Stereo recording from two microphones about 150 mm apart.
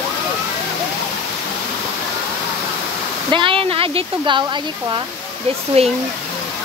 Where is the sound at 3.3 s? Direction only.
35° right (ahead or behind).